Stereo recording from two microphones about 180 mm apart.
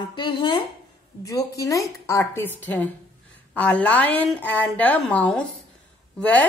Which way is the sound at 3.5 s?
5° left (ahead or behind).